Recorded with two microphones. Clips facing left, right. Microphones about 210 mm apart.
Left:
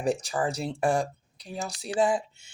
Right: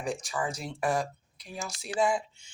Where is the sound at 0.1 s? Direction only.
35° left (ahead or behind).